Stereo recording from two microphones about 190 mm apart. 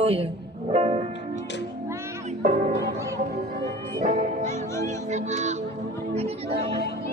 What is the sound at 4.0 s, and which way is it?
Music, 40° right (ahead or behind).